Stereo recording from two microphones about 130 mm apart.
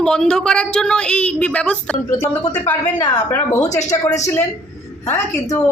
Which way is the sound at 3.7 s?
60° left (ahead or behind).